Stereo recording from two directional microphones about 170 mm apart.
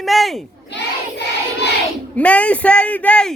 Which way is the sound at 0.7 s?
85° left.